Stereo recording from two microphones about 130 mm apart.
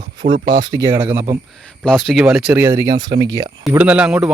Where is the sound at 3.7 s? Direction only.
10° right (ahead or behind).